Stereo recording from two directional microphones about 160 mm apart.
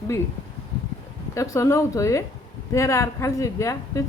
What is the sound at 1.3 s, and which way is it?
Speech, 20° left (ahead or behind).